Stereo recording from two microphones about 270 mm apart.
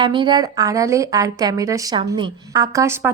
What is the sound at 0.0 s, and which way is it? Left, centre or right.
A woman's voice, centre.